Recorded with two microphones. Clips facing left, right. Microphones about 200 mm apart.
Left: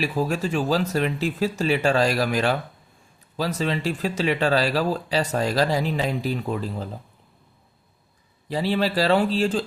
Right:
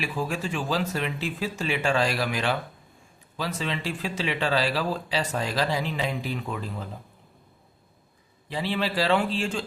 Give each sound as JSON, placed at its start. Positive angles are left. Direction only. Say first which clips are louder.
{"t": 0.0, "sound": "speech", "louder": "left 5 dB", "side_deg": 40}
{"t": 8.4, "sound": "speech", "louder": "left 5 dB", "side_deg": 40}